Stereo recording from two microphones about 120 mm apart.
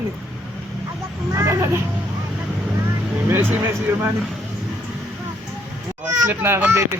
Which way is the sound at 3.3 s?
15° right (ahead or behind).